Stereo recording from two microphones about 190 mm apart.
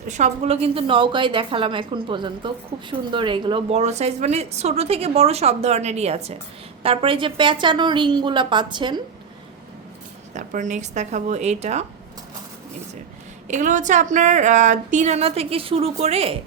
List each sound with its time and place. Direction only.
0.1 s a woman's voice: 35° right (ahead or behind)
10.3 s a woman's voice: 40° right (ahead or behind)
13.5 s a woman's voice: 40° right (ahead or behind)